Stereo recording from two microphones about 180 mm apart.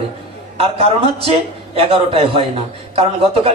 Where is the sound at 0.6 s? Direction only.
35° right (ahead or behind).